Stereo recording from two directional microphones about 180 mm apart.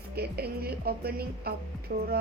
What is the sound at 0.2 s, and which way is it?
Music, 60° right (ahead or behind).